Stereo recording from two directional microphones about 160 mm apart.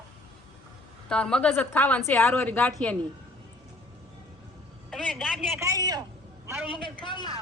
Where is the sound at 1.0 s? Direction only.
5° left (ahead or behind).